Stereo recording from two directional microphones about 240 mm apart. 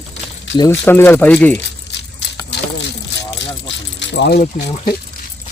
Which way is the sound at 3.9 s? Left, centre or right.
Left.